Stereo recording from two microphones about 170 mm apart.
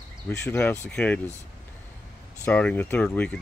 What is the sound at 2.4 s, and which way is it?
Speech, 10° left (ahead or behind).